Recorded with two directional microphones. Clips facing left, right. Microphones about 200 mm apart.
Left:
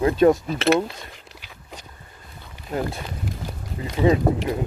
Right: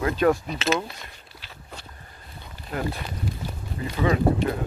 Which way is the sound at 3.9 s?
25° left (ahead or behind).